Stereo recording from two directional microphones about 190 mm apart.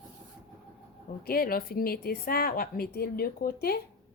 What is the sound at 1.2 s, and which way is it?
A woman's voice, 50° left (ahead or behind).